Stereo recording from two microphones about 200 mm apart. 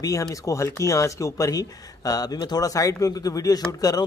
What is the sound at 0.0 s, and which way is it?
Speech, 15° left (ahead or behind).